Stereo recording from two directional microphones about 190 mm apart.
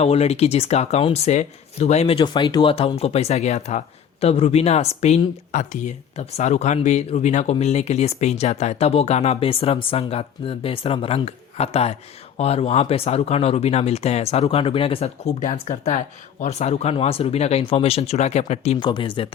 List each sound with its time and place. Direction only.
0.0 s speech: 35° left (ahead or behind)